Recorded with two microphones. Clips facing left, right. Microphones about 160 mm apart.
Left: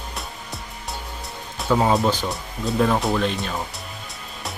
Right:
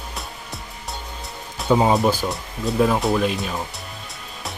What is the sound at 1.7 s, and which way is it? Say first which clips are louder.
Speech: right 2 dB; 15° right (ahead or behind).